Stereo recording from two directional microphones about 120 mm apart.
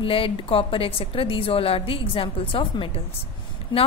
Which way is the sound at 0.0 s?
50° left (ahead or behind).